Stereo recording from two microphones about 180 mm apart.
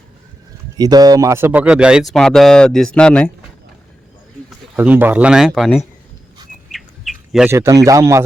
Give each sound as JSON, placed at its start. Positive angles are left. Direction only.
{"t": 0.8, "sound": "speech", "side_deg": -20}
{"t": 4.4, "sound": "speech", "side_deg": -10}
{"t": 6.7, "sound": "bird", "side_deg": 0}
{"t": 7.4, "sound": "speech", "side_deg": -15}